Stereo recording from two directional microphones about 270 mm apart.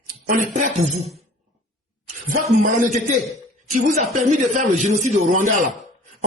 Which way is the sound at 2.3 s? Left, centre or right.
Right.